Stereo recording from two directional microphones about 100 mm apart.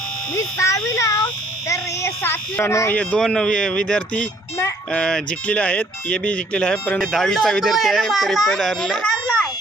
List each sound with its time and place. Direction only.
0.3 s a child's voice: 30° left (ahead or behind)
2.9 s speech: 10° left (ahead or behind)